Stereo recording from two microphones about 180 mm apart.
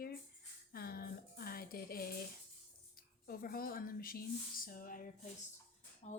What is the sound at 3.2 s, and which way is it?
Speech, 55° left (ahead or behind).